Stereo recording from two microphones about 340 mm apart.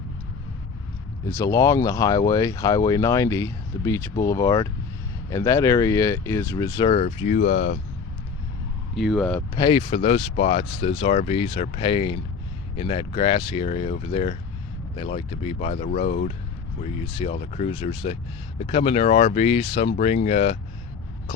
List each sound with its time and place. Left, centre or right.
1.2 s speech: centre
9.0 s speech: centre
9.6 s speech: centre